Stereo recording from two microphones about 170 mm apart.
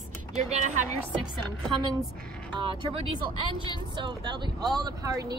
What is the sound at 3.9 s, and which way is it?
A woman's voice, 25° right (ahead or behind).